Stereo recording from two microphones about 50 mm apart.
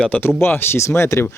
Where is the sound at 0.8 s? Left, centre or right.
Left.